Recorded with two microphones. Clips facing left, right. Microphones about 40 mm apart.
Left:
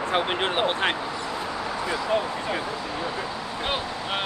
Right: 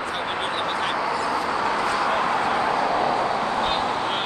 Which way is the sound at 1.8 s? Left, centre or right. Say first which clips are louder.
Right 4 dB; right.